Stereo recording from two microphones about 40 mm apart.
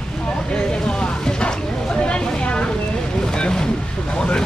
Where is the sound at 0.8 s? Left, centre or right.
Left.